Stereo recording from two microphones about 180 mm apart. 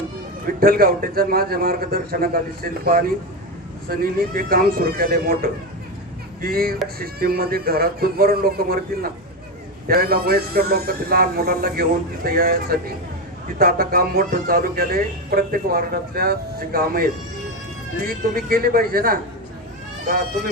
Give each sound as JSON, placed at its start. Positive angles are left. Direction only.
{"t": 0.6, "sound": "a man's voice", "side_deg": -55}
{"t": 3.8, "sound": "a man's voice", "side_deg": -55}